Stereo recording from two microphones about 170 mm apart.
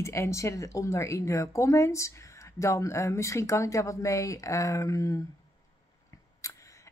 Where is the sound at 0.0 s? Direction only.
15° left (ahead or behind).